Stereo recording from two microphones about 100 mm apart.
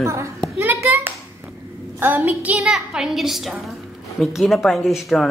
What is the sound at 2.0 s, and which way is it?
A woman's voice, 20° right (ahead or behind).